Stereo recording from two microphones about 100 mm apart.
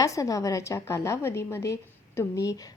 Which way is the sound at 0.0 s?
35° left (ahead or behind).